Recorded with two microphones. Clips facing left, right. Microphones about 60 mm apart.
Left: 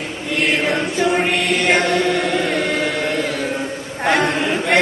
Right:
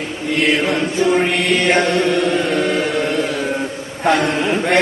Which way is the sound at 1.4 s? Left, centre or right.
Right.